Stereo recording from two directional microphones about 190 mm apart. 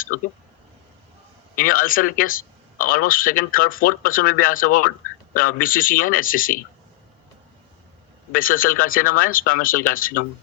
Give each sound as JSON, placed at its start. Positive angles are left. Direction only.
{"t": 1.5, "sound": "a man's voice", "side_deg": 45}
{"t": 8.3, "sound": "a man's voice", "side_deg": 50}